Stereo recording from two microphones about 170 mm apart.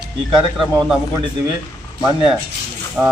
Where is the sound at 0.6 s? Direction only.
Centre (ahead or behind).